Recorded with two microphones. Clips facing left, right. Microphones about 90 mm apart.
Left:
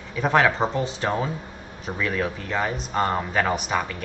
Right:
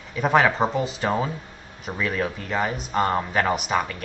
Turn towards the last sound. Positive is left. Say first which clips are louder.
# right 1 dB
turn(degrees=-5)  # may be behind; listen again after turning